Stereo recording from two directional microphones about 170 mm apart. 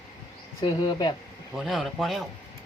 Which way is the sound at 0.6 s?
25° left (ahead or behind).